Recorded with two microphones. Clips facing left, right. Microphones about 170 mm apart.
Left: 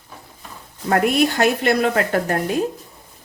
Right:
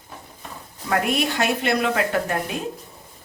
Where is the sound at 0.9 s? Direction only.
45° left (ahead or behind).